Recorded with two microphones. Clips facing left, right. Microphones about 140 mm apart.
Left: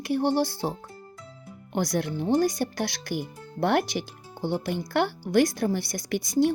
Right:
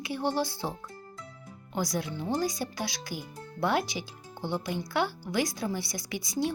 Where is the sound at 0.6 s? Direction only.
55° left (ahead or behind).